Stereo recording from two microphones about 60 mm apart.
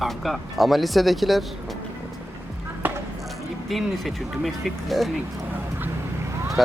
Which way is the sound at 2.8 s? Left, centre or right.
Right.